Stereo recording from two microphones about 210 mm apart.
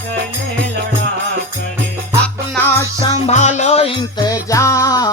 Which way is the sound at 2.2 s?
10° left (ahead or behind).